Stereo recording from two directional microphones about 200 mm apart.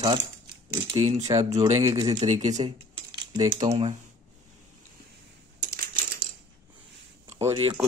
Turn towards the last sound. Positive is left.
turn(degrees=-30)  # may be behind; listen again after turning